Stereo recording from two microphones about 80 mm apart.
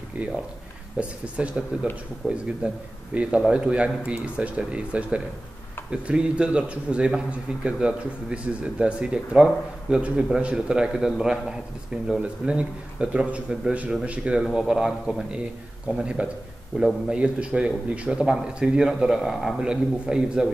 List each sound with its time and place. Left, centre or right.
0.2 s speech: centre